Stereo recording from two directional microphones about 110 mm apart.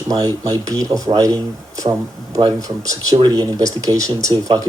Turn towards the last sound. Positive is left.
turn(degrees=-35)  # may be behind; listen again after turning